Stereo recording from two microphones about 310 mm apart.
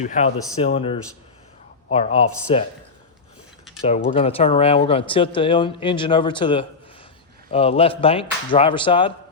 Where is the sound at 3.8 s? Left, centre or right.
Centre.